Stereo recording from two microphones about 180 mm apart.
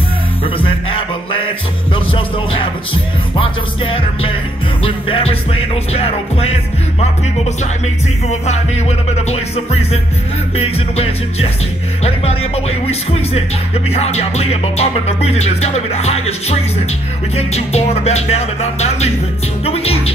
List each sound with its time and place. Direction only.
0.6 s music: 30° left (ahead or behind)
8.3 s music: 35° left (ahead or behind)